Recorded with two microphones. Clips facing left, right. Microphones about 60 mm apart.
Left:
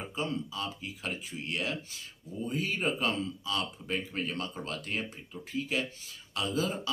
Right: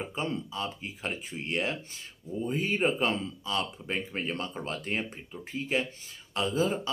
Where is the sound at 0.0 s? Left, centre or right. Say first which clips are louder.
Right 1 dB; right.